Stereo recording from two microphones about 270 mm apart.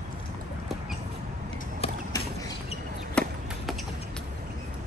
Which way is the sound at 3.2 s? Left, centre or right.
Centre.